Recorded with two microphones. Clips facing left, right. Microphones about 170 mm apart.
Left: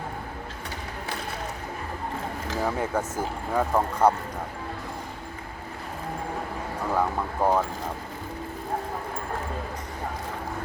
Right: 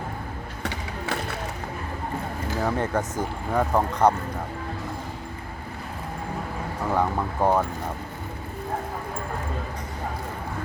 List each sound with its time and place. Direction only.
0.6 s a sound: 80° right
2.6 s speech: 5° left (ahead or behind)
6.9 s speech: 5° right (ahead or behind)